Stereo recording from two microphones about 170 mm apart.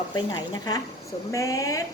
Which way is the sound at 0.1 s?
25° left (ahead or behind).